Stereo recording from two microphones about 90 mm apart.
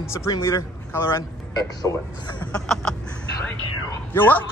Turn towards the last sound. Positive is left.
turn(degrees=20)  # may be behind; listen again after turning